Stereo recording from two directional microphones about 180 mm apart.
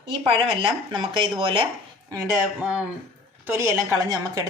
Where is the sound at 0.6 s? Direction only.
30° right (ahead or behind).